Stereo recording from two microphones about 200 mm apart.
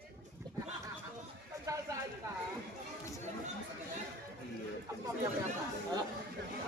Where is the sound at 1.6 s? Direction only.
15° right (ahead or behind).